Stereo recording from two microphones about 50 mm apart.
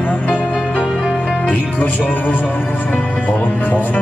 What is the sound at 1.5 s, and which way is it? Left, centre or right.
Music, left.